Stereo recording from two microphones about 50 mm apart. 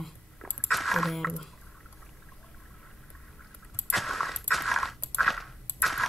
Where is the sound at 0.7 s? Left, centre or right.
Centre.